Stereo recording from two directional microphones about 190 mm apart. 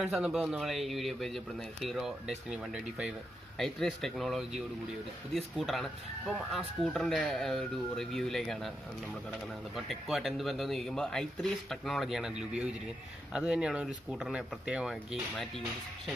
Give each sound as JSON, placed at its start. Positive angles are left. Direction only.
{"t": 0.0, "sound": "a man's voice", "side_deg": -5}
{"t": 9.8, "sound": "a man's voice", "side_deg": 0}